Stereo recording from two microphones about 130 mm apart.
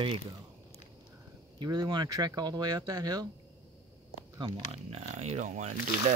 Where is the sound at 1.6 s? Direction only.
35° right (ahead or behind).